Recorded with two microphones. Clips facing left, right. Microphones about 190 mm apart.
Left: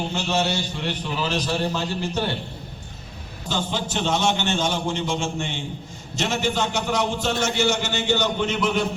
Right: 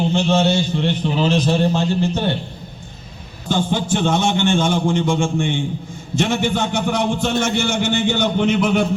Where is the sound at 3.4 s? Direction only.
50° right (ahead or behind).